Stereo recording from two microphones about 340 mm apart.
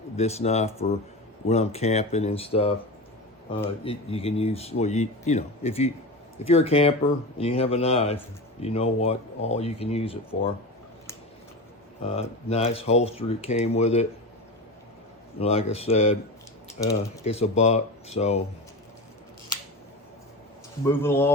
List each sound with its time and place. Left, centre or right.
0.2 s speech: centre
12.0 s speech: centre
15.4 s speech: centre
20.8 s speech: centre